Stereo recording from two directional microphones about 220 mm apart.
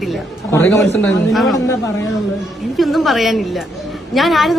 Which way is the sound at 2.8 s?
Centre (ahead or behind).